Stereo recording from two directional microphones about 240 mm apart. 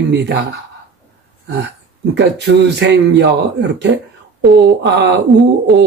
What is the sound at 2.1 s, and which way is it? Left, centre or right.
Speech, right.